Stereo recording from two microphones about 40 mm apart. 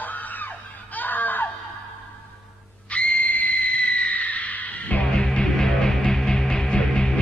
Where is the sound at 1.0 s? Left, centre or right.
Left.